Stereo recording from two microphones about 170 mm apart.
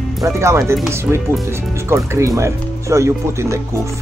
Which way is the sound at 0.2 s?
15° right (ahead or behind).